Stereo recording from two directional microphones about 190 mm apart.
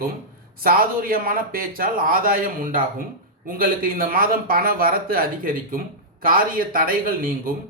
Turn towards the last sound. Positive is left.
turn(degrees=-50)  # may be behind; listen again after turning